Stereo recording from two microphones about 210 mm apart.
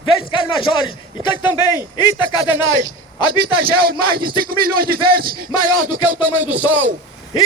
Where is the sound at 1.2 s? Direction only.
20° left (ahead or behind).